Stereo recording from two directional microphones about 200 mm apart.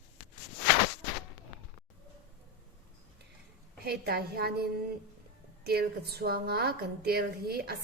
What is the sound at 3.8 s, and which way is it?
A woman's voice, 55° right (ahead or behind).